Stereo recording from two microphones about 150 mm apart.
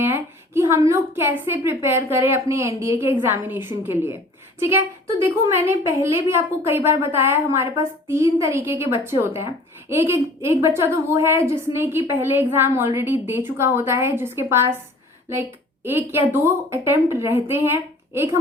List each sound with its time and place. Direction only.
0.0 s a woman's voice: 15° right (ahead or behind)
15.8 s a woman's voice: 15° right (ahead or behind)